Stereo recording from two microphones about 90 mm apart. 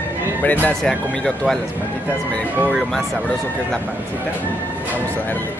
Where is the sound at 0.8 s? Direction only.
5° left (ahead or behind).